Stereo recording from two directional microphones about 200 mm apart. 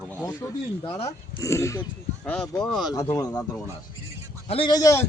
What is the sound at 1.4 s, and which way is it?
Speech, 15° left (ahead or behind).